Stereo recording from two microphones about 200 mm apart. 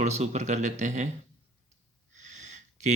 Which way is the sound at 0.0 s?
35° right (ahead or behind).